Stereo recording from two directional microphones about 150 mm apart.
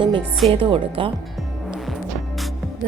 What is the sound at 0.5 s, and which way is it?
Speech, 35° right (ahead or behind).